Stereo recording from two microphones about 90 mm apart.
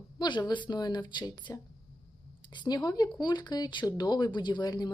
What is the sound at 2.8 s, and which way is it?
Speech, 50° left (ahead or behind).